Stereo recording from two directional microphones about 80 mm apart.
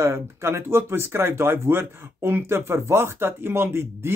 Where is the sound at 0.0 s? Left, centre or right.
Right.